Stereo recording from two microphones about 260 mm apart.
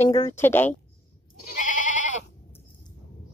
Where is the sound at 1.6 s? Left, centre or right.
Left.